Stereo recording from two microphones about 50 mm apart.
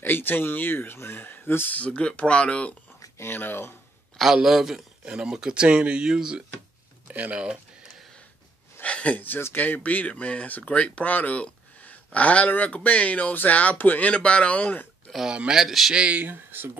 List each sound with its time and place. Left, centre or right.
0.0 s speech: left
1.7 s speech: left
3.2 s speech: left
4.4 s a man's voice: centre
7.1 s speech: right
8.8 s speech: left
15.2 s a man's voice: centre
15.6 s a man's voice: centre
15.9 s speech: right
16.3 s speech: right